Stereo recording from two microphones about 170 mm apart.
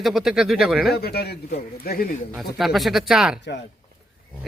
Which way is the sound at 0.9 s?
70° left (ahead or behind).